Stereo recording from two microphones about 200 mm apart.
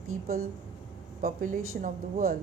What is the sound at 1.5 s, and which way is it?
Speech, 90° right.